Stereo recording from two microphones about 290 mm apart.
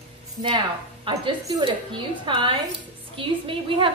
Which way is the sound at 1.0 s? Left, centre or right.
Centre.